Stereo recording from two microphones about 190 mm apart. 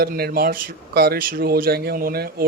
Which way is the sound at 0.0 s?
55° right (ahead or behind).